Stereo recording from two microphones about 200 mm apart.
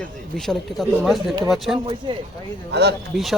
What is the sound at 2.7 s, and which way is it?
Speech, 55° right (ahead or behind).